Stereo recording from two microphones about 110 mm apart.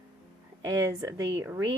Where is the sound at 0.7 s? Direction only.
30° right (ahead or behind).